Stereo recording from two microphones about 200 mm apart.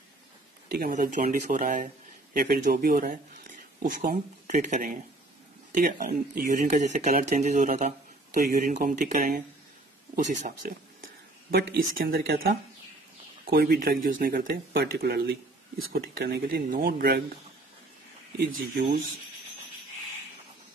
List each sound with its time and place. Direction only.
0.7 s speech: 45° right (ahead or behind)
11.5 s speech: 50° right (ahead or behind)
13.5 s speech: 50° right (ahead or behind)